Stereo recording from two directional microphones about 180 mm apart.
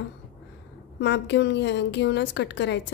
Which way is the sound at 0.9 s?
75° left (ahead or behind).